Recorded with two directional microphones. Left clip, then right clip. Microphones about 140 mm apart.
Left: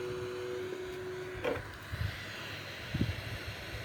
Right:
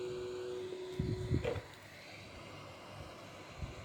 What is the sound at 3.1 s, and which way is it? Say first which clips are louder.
Vehicle: left 8 dB; centre (ahead or behind).